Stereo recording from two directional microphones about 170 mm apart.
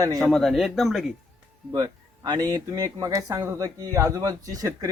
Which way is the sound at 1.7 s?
20° right (ahead or behind).